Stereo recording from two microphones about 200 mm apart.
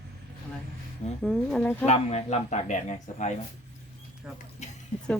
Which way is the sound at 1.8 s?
35° left (ahead or behind).